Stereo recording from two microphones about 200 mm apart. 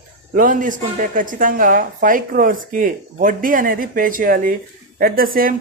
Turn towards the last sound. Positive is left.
turn(degrees=-45)  # may be behind; listen again after turning